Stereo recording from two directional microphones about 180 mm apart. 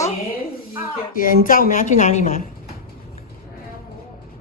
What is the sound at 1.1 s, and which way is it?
A woman's voice, 50° left (ahead or behind).